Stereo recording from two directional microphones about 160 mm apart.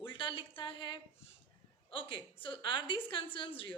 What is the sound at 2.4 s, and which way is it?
A woman's voice, 30° left (ahead or behind).